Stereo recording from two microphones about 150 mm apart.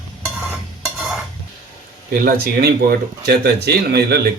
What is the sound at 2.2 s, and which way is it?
Speech, 90° right.